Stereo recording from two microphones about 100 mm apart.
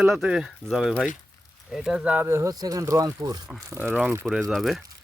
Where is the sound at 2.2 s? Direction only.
30° right (ahead or behind).